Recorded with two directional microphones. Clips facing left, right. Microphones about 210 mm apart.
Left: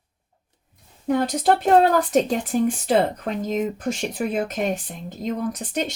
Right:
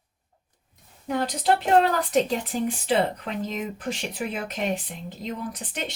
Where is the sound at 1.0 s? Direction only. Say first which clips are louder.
Left 5 dB; 45° left (ahead or behind).